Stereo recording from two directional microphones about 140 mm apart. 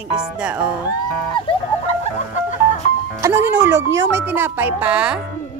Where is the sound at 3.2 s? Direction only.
15° right (ahead or behind).